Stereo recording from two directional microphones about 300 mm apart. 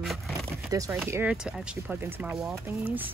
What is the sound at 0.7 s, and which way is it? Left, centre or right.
Speech, centre.